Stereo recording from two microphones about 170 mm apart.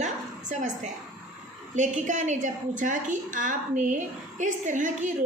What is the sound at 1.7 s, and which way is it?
A woman's voice, 45° right (ahead or behind).